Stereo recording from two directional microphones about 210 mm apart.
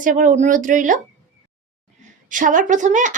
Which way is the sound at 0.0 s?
40° right (ahead or behind).